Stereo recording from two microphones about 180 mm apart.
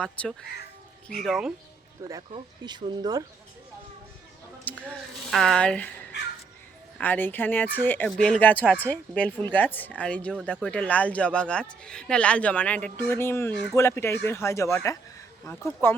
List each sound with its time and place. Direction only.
0.0 s speech: 5° left (ahead or behind)
2.3 s speech: 25° right (ahead or behind)
4.7 s speech: 10° left (ahead or behind)
7.0 s speech: 10° left (ahead or behind)